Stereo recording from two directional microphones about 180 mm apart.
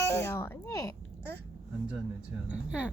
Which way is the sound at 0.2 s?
15° left (ahead or behind).